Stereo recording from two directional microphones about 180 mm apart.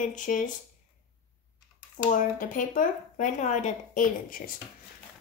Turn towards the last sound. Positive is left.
turn(degrees=50)  # may be behind; listen again after turning